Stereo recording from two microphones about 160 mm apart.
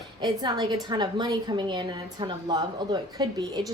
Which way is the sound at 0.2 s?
25° right (ahead or behind).